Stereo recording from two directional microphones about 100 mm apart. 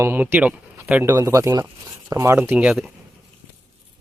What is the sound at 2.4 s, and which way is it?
Speech, 15° right (ahead or behind).